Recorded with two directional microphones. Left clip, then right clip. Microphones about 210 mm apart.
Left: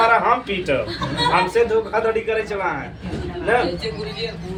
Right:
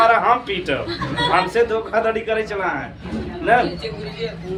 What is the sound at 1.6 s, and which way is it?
Speech, 25° right (ahead or behind).